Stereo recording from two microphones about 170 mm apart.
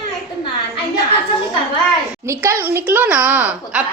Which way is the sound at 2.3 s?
15° right (ahead or behind).